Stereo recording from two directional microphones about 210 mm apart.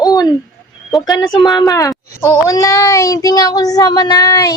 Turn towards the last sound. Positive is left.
turn(degrees=15)  # may be behind; listen again after turning